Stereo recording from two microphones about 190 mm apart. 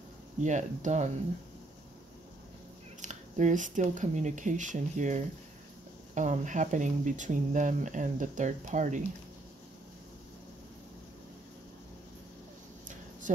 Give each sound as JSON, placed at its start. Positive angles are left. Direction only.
{"t": 0.4, "sound": "speech", "side_deg": -40}
{"t": 3.0, "sound": "speech", "side_deg": -40}